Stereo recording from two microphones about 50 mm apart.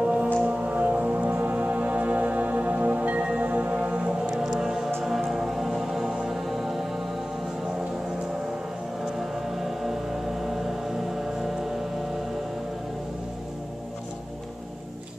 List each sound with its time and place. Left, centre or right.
0.0 s music: right
4.3 s music: centre
9.1 s music: centre